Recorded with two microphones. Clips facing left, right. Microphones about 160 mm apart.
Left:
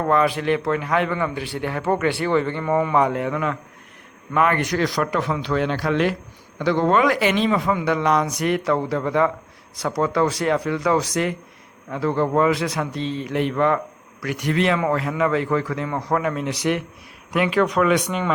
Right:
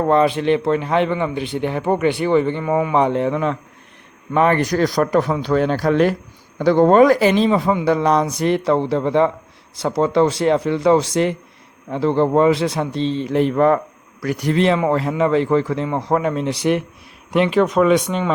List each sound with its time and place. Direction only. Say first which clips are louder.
0.0 s a man's voice: right 4 dB; 25° right (ahead or behind); by 2.9 s 10° right (ahead or behind)
2.9 s a man's voice: right 3 dB; 25° right (ahead or behind)